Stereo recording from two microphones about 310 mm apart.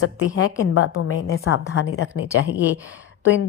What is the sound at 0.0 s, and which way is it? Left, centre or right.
A woman's voice, left.